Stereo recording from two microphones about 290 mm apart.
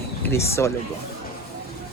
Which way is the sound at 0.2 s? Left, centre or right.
Centre.